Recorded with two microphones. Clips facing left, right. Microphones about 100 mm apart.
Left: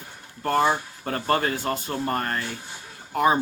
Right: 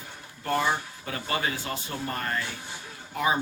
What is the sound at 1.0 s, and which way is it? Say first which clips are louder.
Speech: left 7 dB; 50° left (ahead or behind).